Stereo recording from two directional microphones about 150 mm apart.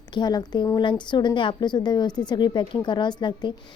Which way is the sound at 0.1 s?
30° left (ahead or behind).